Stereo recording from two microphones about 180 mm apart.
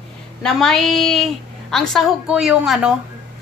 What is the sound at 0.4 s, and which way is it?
A woman's voice, 5° left (ahead or behind).